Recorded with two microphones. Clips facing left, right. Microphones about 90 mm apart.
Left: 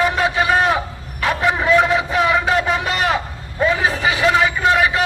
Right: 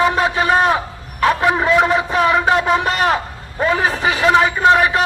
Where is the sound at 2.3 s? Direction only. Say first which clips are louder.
Right 3 dB; 35° right (ahead or behind).